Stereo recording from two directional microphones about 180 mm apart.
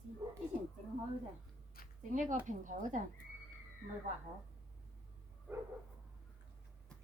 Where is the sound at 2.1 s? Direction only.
45° right (ahead or behind).